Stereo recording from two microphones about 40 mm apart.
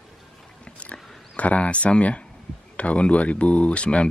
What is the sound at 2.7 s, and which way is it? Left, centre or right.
Speech, left.